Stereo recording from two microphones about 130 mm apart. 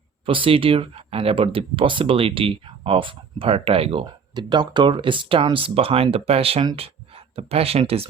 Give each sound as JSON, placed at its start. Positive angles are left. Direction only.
{"t": 0.3, "sound": "speech", "side_deg": -40}
{"t": 4.4, "sound": "speech", "side_deg": -35}